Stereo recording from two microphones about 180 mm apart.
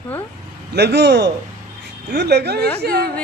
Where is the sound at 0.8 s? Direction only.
70° right (ahead or behind).